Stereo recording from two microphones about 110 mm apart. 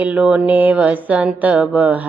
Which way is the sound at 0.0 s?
10° right (ahead or behind).